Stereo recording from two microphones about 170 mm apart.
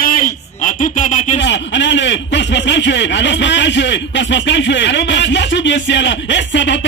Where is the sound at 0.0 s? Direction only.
55° left (ahead or behind).